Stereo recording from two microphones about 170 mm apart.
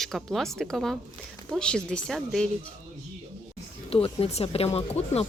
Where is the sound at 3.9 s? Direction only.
35° left (ahead or behind).